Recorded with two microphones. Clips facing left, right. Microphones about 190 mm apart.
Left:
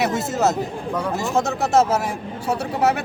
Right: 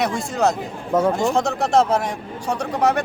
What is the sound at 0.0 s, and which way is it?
Speech, 5° left (ahead or behind).